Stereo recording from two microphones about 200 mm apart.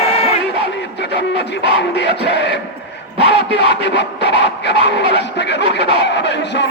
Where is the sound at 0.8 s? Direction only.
60° left (ahead or behind).